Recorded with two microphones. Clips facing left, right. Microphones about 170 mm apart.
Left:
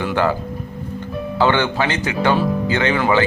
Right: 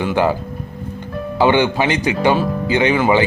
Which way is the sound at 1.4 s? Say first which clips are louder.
Right 3 dB; 15° right (ahead or behind).